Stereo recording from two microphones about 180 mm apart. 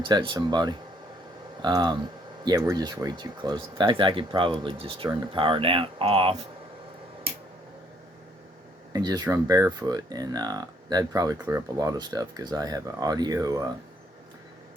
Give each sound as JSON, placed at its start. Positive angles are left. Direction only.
{"t": 0.0, "sound": "speech", "side_deg": -25}
{"t": 8.9, "sound": "speech", "side_deg": -20}